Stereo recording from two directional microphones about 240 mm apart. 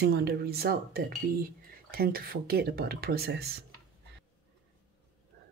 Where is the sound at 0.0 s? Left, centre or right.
Right.